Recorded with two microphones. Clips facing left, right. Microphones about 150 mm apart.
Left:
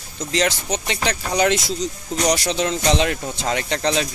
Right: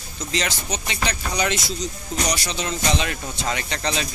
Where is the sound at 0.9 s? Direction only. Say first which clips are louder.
Left 3 dB; 90° left.